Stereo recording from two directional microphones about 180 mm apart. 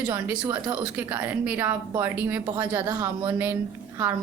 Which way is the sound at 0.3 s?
10° right (ahead or behind).